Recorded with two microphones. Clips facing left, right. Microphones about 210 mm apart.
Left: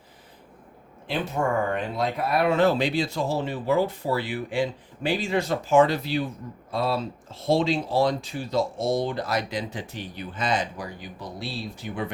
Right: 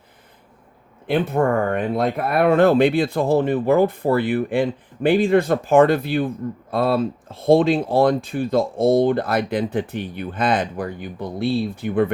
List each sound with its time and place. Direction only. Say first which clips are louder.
1.0 s speech: right 7 dB; 55° right (ahead or behind)